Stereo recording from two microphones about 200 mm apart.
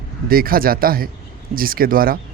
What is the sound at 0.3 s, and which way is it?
Speech, 45° right (ahead or behind).